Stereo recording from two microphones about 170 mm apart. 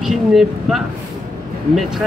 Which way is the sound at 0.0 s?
Centre (ahead or behind).